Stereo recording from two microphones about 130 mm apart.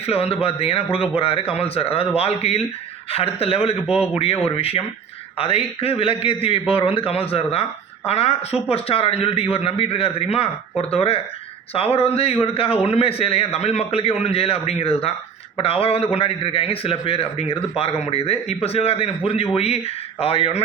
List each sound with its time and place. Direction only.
0.0 s a man's voice: 50° left (ahead or behind)